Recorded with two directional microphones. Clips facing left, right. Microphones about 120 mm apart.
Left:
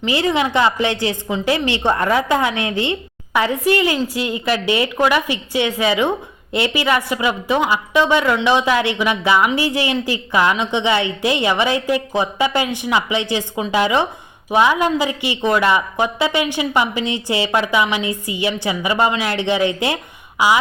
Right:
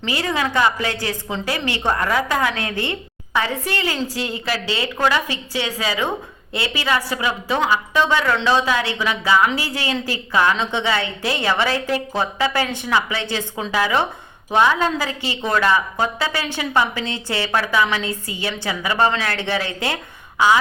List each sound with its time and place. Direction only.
0.0 s a woman's voice: 20° left (ahead or behind)